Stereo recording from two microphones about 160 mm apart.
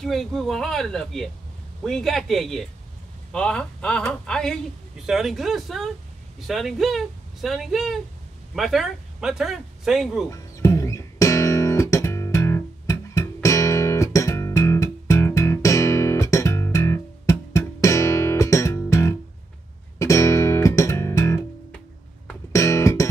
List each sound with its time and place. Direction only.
0.0 s a woman's voice: centre (ahead or behind)
10.3 s music: 20° left (ahead or behind)
22.5 s music: 20° left (ahead or behind)